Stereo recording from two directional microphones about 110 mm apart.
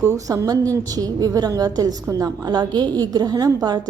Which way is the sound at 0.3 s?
35° right (ahead or behind).